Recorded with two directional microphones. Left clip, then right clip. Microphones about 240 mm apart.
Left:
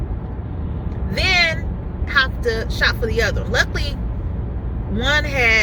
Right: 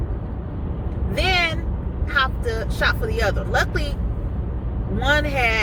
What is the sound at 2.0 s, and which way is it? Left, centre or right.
Speech, centre.